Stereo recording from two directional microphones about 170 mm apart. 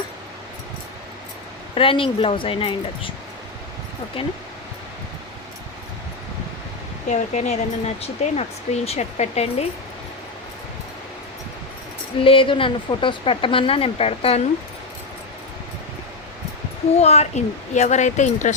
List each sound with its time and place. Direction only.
1.7 s speech: 30° left (ahead or behind)
4.2 s speech: 35° left (ahead or behind)
7.1 s speech: 45° left (ahead or behind)
12.2 s speech: 30° left (ahead or behind)
17.0 s speech: 40° left (ahead or behind)